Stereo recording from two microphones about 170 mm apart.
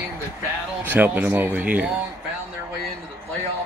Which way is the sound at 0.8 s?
10° right (ahead or behind).